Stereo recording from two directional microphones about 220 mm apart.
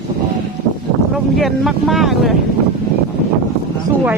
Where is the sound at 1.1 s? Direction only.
Centre (ahead or behind).